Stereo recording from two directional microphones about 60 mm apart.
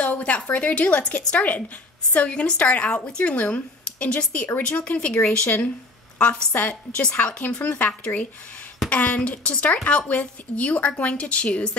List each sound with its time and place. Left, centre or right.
0.0 s a woman's voice: left
7.5 s speech: centre